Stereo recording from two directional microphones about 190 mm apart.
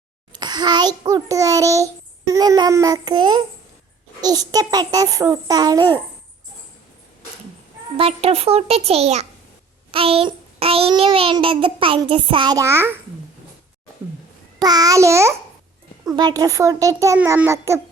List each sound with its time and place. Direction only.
0.3 s a child's voice: 20° right (ahead or behind)
7.9 s a child's voice: 30° right (ahead or behind); by 13.0 s 15° right (ahead or behind)
14.6 s a child's voice: 20° right (ahead or behind)